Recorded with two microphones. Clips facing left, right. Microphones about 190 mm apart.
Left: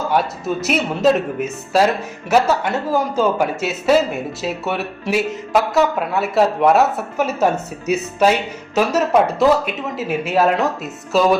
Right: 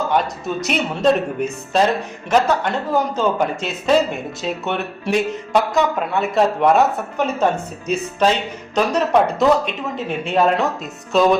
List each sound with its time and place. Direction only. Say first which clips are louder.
0.1 s speech: left 1 dB; 5° left (ahead or behind)